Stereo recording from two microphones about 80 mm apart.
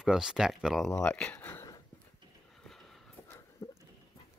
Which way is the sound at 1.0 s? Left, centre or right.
Centre.